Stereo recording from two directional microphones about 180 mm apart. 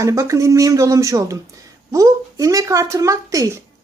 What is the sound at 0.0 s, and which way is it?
Speech, 15° right (ahead or behind).